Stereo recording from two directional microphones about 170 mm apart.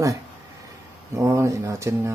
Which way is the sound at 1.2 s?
15° right (ahead or behind).